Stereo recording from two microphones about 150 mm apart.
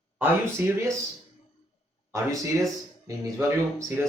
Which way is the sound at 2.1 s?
20° right (ahead or behind).